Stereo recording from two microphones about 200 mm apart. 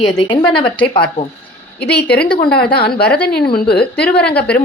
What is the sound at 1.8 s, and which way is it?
Speech, 55° left (ahead or behind).